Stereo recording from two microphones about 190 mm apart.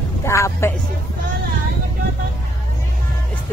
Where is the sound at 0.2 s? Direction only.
15° left (ahead or behind).